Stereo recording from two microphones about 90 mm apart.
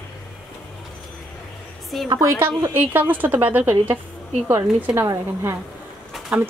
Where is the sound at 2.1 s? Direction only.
30° right (ahead or behind).